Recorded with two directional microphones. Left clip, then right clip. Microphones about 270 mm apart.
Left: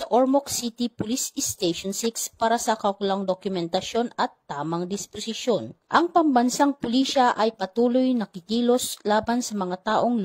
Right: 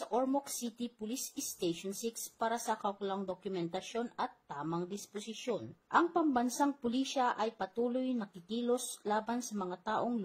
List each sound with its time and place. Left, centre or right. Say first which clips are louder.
0.1 s a woman's voice: left 14 dB; left